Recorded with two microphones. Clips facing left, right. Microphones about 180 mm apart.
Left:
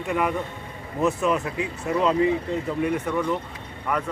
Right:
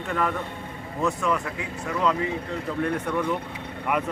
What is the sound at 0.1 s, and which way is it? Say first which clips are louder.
Speech: left 2 dB; 15° left (ahead or behind).